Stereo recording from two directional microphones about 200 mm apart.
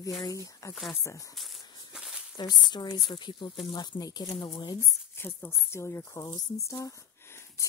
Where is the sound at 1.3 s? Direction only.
Centre (ahead or behind).